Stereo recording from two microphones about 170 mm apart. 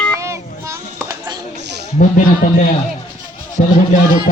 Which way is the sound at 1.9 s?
50° left (ahead or behind).